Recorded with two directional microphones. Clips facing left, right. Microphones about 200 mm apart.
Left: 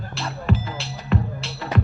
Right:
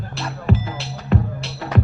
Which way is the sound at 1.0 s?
55° right (ahead or behind).